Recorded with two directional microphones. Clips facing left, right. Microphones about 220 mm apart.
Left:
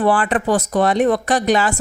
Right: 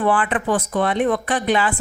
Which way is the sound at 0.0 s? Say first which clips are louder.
Left 3 dB; 40° left (ahead or behind).